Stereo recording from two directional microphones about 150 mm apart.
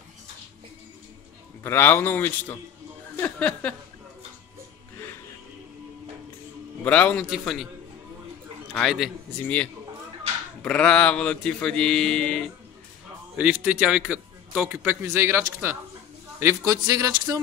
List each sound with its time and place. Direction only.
1.6 s speech: 15° left (ahead or behind)
6.8 s a man's voice: 10° left (ahead or behind)
8.7 s a man's voice: centre (ahead or behind)
10.6 s speech: 10° left (ahead or behind)
13.4 s a man's voice: 10° right (ahead or behind)